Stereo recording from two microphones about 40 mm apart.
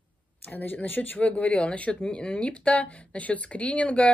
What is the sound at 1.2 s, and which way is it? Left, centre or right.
Speech, left.